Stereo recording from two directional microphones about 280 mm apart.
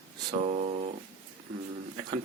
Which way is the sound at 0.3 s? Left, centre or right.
Right.